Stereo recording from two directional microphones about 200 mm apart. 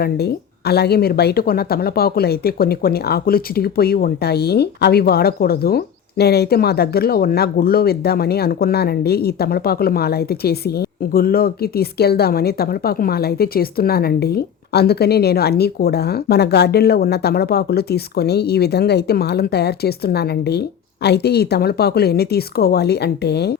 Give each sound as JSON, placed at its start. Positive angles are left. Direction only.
{"t": 0.0, "sound": "speech", "side_deg": 55}